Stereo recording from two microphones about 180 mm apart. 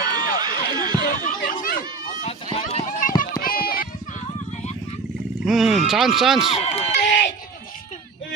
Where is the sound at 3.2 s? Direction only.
55° left (ahead or behind).